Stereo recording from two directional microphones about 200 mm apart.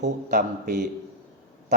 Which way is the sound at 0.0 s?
40° right (ahead or behind).